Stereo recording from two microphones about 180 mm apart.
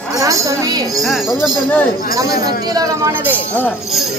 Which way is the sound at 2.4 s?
20° right (ahead or behind).